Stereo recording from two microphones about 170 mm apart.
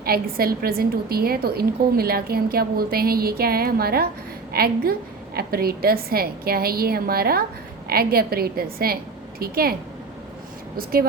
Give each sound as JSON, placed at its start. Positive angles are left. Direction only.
{"t": 0.0, "sound": "a woman's voice", "side_deg": -60}